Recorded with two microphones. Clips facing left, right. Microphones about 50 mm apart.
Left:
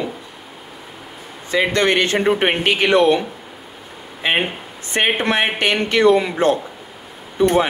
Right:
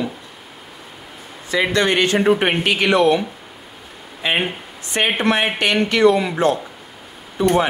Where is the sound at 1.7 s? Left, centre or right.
Left.